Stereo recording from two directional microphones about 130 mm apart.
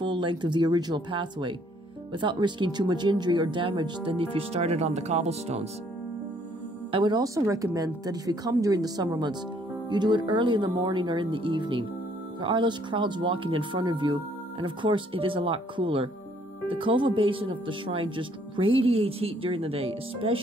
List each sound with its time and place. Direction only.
0.0 s speech: 35° right (ahead or behind); by 5.7 s 55° right (ahead or behind)
6.9 s speech: 35° right (ahead or behind)